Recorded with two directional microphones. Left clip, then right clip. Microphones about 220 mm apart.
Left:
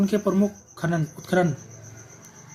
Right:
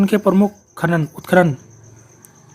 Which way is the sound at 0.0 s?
40° right (ahead or behind).